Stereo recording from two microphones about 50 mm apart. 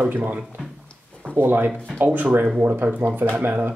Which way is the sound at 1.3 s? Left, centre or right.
Right.